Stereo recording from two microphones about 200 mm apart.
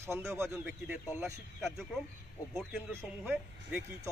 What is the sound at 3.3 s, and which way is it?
Speech, 10° right (ahead or behind).